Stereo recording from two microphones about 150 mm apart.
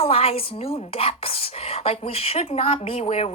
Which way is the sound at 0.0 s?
40° left (ahead or behind).